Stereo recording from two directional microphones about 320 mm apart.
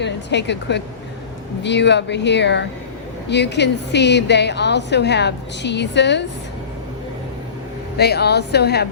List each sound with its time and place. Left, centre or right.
0.0 s a woman's voice: left
7.9 s a woman's voice: left